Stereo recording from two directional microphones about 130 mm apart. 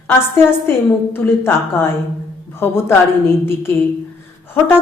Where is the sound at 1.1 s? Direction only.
15° left (ahead or behind).